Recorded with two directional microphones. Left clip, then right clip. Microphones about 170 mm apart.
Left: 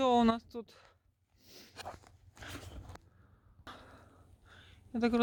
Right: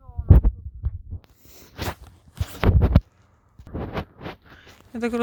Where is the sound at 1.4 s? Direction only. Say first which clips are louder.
Right 2 dB; 10° left (ahead or behind).